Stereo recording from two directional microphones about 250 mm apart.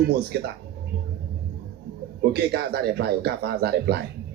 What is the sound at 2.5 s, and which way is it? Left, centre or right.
Speech, right.